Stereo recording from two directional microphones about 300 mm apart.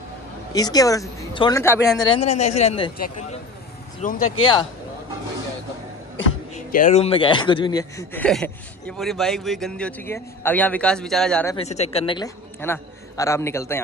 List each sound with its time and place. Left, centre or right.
0.5 s a man's voice: centre
2.2 s a man's voice: left
6.5 s speech: left; by 11.5 s centre
11.5 s a man's voice: left